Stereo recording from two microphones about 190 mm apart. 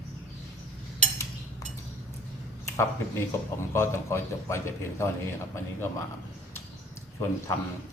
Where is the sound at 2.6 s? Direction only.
15° left (ahead or behind).